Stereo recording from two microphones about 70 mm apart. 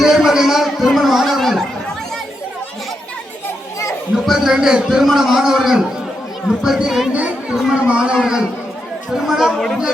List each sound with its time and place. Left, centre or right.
0.0 s a sound: centre
0.9 s chatter: centre
4.1 s a man's voice: centre
7.1 s a man's voice: centre